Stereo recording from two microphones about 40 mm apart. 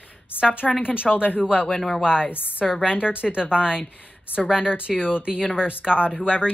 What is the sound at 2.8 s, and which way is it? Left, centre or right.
Speech, right.